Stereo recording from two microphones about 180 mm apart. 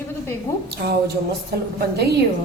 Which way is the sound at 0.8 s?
60° right (ahead or behind).